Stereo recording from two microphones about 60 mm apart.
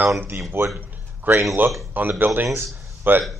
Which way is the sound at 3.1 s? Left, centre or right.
Right.